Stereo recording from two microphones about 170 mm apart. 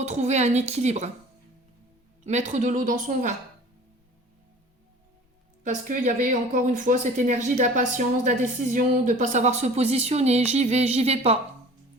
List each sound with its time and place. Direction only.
0.0 s speech: 45° right (ahead or behind)
2.2 s speech: 45° right (ahead or behind)
5.6 s speech: 45° right (ahead or behind)